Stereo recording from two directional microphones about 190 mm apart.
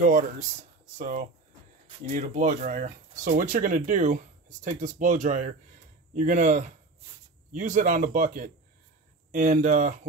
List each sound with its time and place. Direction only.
0.9 s speech: 40° right (ahead or behind)